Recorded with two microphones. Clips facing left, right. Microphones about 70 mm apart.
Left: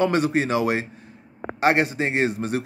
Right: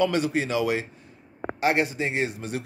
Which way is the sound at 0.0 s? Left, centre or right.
Left.